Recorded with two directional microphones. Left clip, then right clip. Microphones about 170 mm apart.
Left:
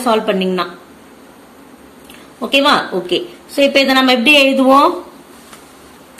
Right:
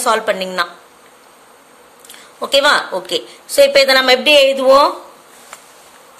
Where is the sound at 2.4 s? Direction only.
45° right (ahead or behind).